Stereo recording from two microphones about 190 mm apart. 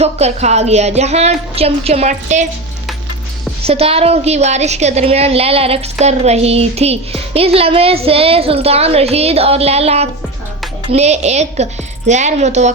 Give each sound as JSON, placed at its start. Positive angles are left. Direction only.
{"t": 0.0, "sound": "a woman's voice", "side_deg": -35}
{"t": 3.6, "sound": "a woman's voice", "side_deg": -30}